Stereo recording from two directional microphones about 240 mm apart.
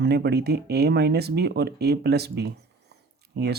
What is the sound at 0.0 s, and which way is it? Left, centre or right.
Speech, right.